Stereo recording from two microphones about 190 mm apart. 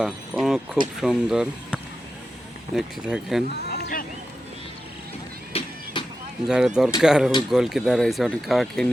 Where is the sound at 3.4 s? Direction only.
60° left (ahead or behind).